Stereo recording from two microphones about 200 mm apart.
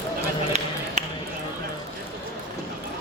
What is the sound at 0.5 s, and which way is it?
Ping, 35° right (ahead or behind).